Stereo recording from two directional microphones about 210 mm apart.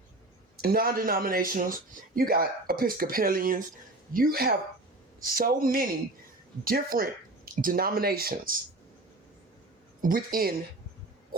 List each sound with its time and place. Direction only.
0.5 s speech: 45° right (ahead or behind)
10.0 s speech: 40° right (ahead or behind)